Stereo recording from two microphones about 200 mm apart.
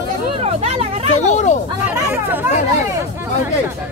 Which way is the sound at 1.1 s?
35° left (ahead or behind).